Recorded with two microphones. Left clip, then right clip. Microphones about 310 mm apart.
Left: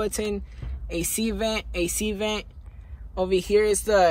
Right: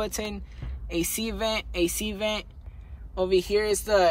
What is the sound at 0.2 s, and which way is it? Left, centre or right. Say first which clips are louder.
Speech: left 5 dB; right.